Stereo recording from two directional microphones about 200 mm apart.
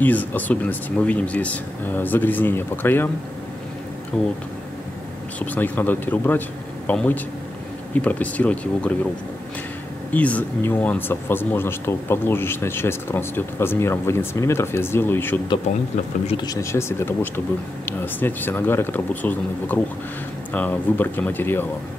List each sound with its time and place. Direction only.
0.0 s speech: 10° left (ahead or behind)
4.1 s speech: centre (ahead or behind)
5.5 s speech: 10° left (ahead or behind)
10.1 s speech: 5° left (ahead or behind)